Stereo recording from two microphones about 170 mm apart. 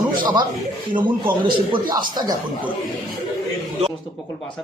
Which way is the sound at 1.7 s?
25° right (ahead or behind).